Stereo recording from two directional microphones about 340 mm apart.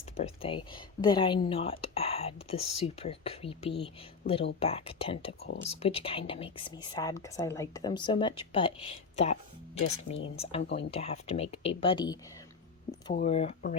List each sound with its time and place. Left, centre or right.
0.2 s a woman's voice: centre
4.2 s speech: left
4.6 s a woman's voice: centre
13.1 s speech: centre